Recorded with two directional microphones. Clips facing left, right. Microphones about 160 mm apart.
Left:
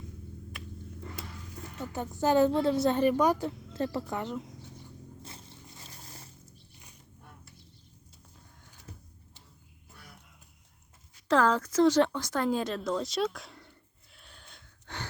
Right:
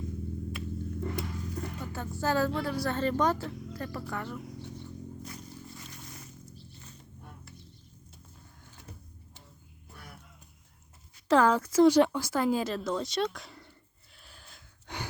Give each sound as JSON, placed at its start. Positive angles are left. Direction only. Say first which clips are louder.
{"t": 1.8, "sound": "a woman's voice", "louder": "left 5 dB", "side_deg": 20}
{"t": 5.2, "sound": "vehicle", "louder": "right 6 dB", "side_deg": 25}
{"t": 11.3, "sound": "speech", "louder": "right 2 dB", "side_deg": -10}
{"t": 14.9, "sound": "gasp", "louder": "right 2 dB", "side_deg": -15}